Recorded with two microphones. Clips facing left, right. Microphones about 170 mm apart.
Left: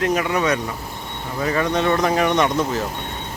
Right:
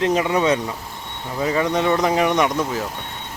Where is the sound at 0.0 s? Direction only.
25° right (ahead or behind).